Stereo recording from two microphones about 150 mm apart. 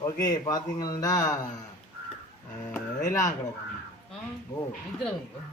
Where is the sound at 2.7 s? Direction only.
20° left (ahead or behind).